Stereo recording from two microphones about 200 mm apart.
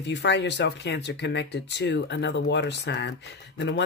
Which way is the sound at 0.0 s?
60° left (ahead or behind).